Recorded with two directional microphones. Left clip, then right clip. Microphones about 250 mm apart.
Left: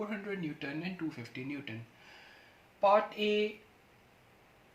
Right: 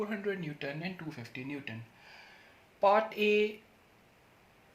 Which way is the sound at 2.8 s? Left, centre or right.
Right.